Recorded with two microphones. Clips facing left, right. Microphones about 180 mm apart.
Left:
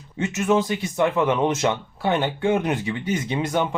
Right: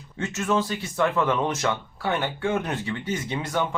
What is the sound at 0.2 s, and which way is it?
Speech, 15° left (ahead or behind).